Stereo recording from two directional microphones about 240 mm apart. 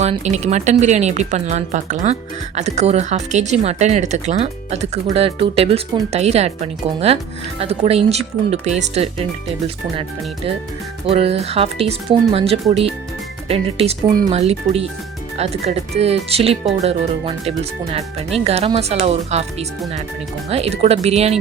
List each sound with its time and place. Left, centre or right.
0.0 s speech: right
7.6 s speech: right